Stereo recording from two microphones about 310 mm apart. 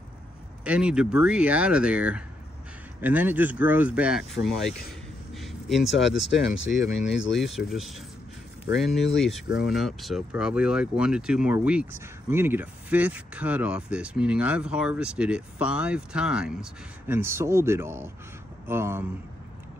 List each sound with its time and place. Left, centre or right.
0.7 s speech: centre
5.3 s a sound: centre
6.7 s speech: left
7.3 s speech: centre